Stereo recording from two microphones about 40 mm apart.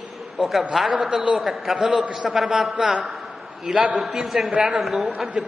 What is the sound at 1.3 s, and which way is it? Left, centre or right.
A man's voice, centre.